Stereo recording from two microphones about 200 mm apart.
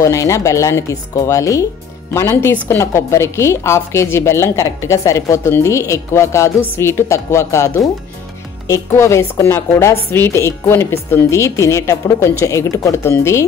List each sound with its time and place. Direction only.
0.0 s a woman's voice: 15° left (ahead or behind)